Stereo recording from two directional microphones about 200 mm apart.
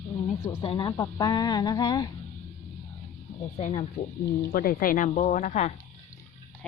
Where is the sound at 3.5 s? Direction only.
35° left (ahead or behind).